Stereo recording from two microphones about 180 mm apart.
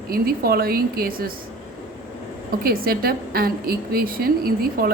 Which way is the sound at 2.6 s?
55° right (ahead or behind).